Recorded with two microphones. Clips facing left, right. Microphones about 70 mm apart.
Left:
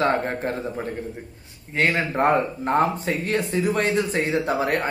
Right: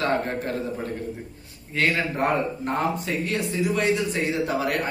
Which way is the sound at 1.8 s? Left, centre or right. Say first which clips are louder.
Left 2 dB; left.